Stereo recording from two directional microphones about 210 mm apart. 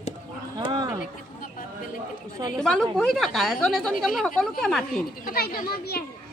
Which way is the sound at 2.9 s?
Centre (ahead or behind).